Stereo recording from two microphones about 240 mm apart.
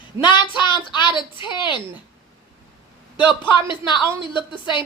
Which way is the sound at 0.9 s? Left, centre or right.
Centre.